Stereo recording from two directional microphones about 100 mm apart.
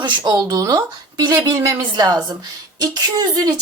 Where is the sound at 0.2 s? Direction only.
35° right (ahead or behind).